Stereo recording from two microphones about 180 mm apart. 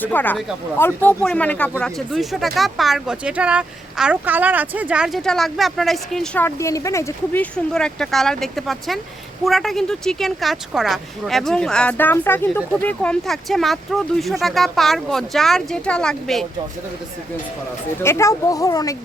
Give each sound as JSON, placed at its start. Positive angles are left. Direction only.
{"t": 0.0, "sound": "speech", "side_deg": 10}
{"t": 7.5, "sound": "speech", "side_deg": 5}
{"t": 18.0, "sound": "speech", "side_deg": 15}